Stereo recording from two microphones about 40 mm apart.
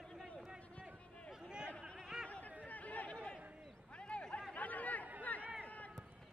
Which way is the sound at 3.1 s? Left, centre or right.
Left.